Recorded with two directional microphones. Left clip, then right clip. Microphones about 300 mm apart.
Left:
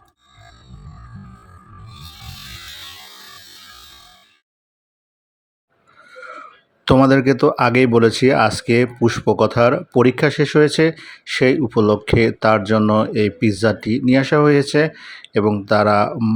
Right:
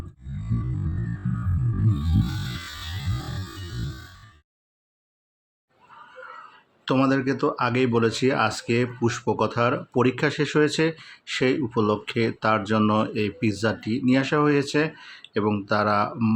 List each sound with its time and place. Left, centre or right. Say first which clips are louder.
2.7 s music: left 2 dB; centre
6.8 s speech: left 9 dB; left